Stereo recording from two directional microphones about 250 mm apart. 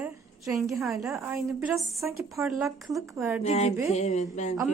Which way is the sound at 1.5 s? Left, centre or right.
Centre.